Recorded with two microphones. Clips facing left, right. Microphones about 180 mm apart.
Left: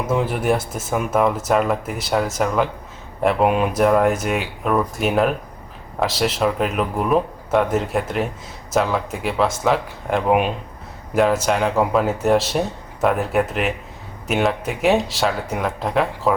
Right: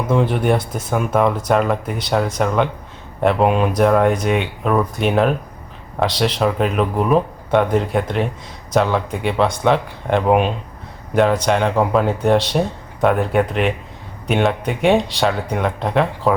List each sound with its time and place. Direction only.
0.1 s speech: 5° left (ahead or behind)